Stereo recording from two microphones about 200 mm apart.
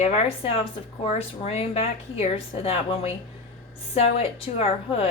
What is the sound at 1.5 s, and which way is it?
A woman's voice, 30° left (ahead or behind).